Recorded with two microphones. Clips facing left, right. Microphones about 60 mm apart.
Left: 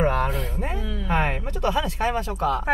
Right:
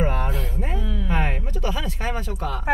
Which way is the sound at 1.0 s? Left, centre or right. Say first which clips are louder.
Left 4 dB; left.